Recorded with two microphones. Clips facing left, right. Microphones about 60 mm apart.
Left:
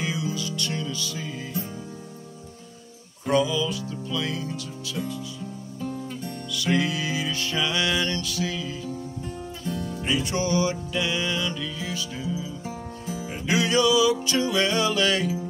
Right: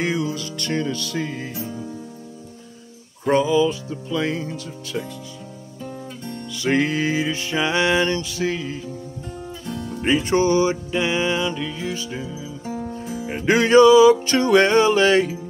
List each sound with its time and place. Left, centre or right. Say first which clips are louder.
0.0 s music: right 5 dB; right
3.3 s music: right 6 dB; right
4.9 s speech: right 2 dB; right
6.5 s music: right 4 dB; right
9.7 s music: even; centre
10.0 s music: right 8 dB; right
13.3 s music: right 8 dB; right